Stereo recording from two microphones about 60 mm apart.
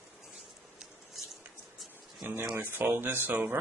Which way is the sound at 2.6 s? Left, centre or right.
Right.